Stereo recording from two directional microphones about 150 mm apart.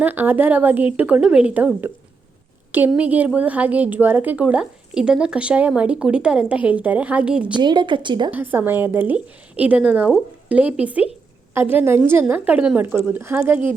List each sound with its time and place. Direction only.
0.0 s a woman's voice: 15° right (ahead or behind)
7.6 s a woman's voice: 30° right (ahead or behind)
8.3 s a woman's voice: 10° right (ahead or behind)